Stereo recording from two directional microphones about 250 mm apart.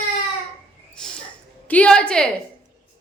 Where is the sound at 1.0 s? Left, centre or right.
Centre.